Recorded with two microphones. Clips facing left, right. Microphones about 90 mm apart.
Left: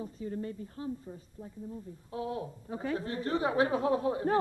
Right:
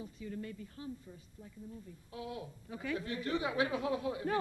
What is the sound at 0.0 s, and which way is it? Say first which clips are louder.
Speech: left 6 dB; 35° left (ahead or behind).